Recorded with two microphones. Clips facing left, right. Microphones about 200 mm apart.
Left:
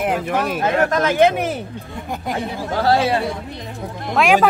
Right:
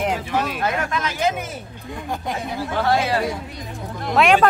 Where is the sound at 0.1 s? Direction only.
55° left (ahead or behind).